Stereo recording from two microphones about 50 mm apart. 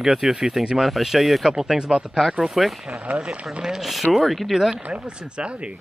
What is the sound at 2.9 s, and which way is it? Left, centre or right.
Speech, right.